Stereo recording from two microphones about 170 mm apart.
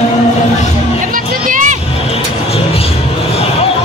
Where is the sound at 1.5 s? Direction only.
50° right (ahead or behind).